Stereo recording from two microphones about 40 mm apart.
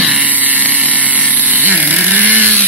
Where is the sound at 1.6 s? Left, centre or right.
Right.